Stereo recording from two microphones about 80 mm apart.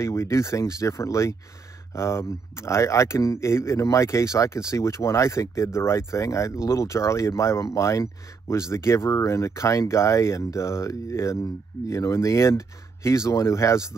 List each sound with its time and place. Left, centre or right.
0.0 s speech: left